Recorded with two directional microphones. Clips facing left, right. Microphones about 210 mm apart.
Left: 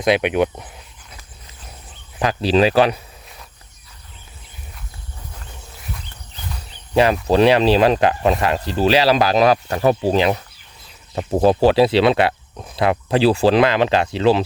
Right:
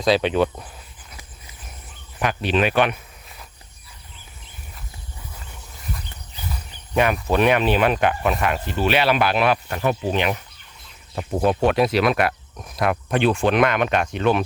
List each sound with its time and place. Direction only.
0.0 s speech: 20° left (ahead or behind)
2.2 s speech: 35° left (ahead or behind)
6.9 s speech: 30° left (ahead or behind)